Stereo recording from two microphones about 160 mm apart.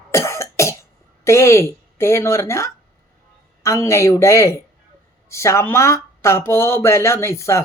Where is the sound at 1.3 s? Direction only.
15° left (ahead or behind).